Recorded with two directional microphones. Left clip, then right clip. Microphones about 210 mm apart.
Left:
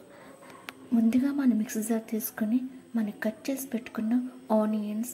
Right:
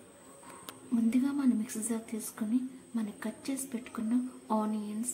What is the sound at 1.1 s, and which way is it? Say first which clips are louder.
A woman's voice: left 2 dB; 20° left (ahead or behind).